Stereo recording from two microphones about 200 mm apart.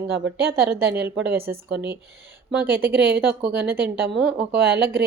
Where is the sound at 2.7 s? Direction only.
10° right (ahead or behind).